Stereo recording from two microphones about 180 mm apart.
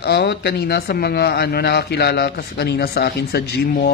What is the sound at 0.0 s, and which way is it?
A man's voice, 65° left (ahead or behind).